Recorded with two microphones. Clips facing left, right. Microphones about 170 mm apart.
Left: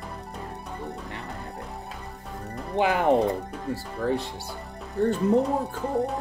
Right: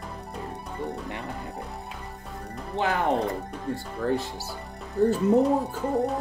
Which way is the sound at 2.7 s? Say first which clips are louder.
Left 3 dB; 10° left (ahead or behind).